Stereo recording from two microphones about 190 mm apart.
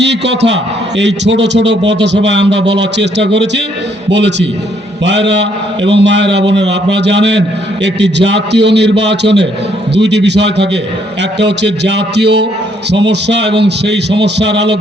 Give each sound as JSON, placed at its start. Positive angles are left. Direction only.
{"t": 0.0, "sound": "a man's voice", "side_deg": -65}